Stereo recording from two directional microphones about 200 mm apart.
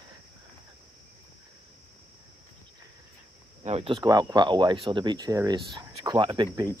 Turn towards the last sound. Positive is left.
turn(degrees=-25)  # may be behind; listen again after turning